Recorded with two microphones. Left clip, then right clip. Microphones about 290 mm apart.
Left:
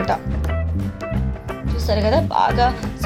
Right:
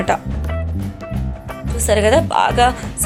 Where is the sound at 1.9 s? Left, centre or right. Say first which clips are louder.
Right 5 dB; right.